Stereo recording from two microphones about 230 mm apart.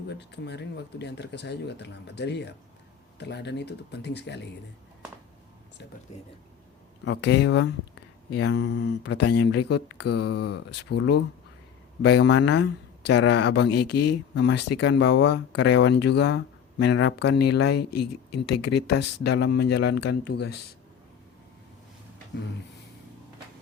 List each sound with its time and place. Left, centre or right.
0.1 s speech: left
7.0 s speech: left
13.9 s speech: left
14.3 s speech: left
17.7 s speech: left
18.6 s speech: left